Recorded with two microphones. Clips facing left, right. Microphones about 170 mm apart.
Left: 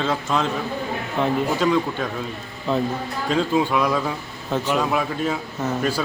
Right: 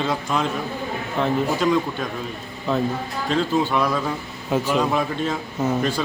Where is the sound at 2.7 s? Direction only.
Centre (ahead or behind).